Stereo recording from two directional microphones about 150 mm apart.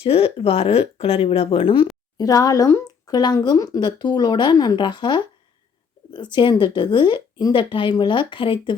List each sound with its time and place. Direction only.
0.0 s a woman's voice: 40° left (ahead or behind)
2.1 s a woman's voice: 25° left (ahead or behind)